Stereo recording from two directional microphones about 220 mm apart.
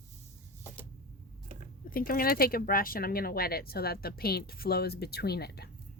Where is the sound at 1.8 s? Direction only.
40° left (ahead or behind).